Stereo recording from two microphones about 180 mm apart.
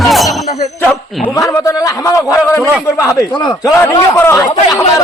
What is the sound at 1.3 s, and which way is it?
A man's voice, 20° left (ahead or behind).